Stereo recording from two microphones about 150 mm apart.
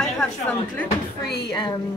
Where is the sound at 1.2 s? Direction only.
90° left.